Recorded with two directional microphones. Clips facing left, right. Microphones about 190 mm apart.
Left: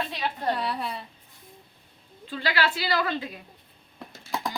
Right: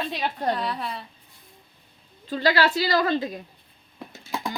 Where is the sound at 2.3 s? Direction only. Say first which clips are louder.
Right 6 dB; 40° right (ahead or behind).